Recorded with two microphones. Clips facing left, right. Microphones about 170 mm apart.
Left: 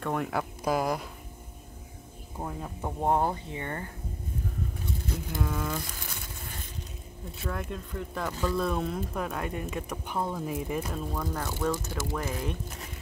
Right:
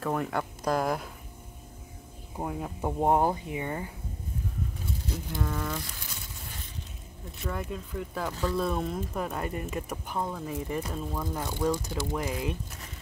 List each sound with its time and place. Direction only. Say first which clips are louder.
0.0 s speech: even; centre (ahead or behind)
2.3 s speech: right 3 dB; 10° right (ahead or behind)
5.4 s speech: left 1 dB; 5° left (ahead or behind)
7.4 s speech: right 1 dB; centre (ahead or behind)
11.3 s speech: right 3 dB; 15° right (ahead or behind)